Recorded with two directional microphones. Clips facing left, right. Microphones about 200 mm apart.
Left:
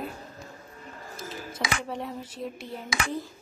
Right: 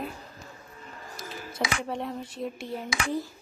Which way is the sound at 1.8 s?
5° left (ahead or behind).